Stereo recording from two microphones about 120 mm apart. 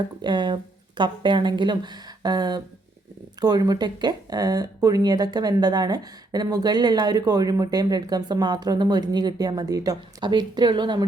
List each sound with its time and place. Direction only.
0.2 s speech: 40° right (ahead or behind)